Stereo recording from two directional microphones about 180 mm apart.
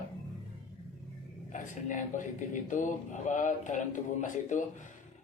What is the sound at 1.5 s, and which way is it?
Speech, 45° left (ahead or behind).